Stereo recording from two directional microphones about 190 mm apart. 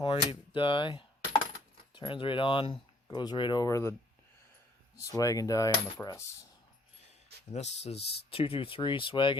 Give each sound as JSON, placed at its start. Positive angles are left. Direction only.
{"t": 0.0, "sound": "coin", "side_deg": 25}
{"t": 1.9, "sound": "speech", "side_deg": 25}
{"t": 4.9, "sound": "coin", "side_deg": 20}
{"t": 7.5, "sound": "speech", "side_deg": 35}